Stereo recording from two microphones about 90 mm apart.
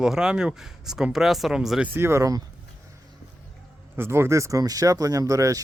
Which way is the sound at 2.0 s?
30° right (ahead or behind).